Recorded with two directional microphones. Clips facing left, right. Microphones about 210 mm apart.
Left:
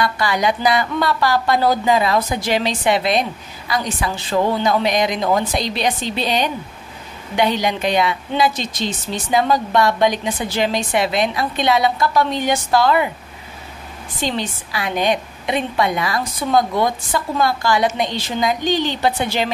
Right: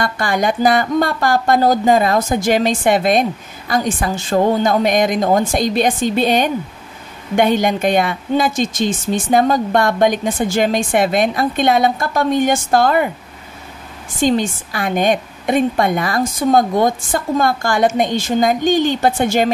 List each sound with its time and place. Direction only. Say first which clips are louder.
0.0 s speech: right 1 dB; 50° right (ahead or behind)
14.1 s speech: right 8 dB; 45° right (ahead or behind)